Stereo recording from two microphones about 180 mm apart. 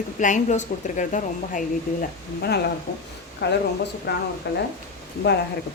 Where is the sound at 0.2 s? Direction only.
45° left (ahead or behind).